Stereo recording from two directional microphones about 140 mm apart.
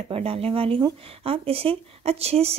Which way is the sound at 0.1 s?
45° right (ahead or behind).